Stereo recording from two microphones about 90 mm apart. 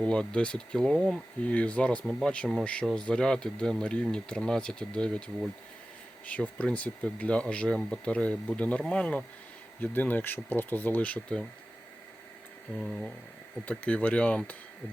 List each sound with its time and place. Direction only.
0.0 s speech: 10° left (ahead or behind)
1.4 s speech: 15° left (ahead or behind)
12.8 s speech: centre (ahead or behind)
13.7 s speech: 15° left (ahead or behind)